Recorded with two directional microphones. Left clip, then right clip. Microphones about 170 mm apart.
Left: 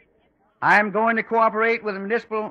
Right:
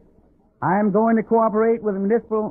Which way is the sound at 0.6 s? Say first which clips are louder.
Left 2 dB; 20° right (ahead or behind).